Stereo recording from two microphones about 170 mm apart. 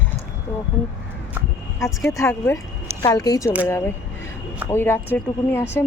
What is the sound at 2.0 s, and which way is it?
A woman's voice, 15° left (ahead or behind).